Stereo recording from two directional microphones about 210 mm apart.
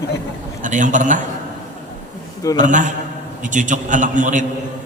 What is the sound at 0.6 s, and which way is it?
Speech, 35° right (ahead or behind).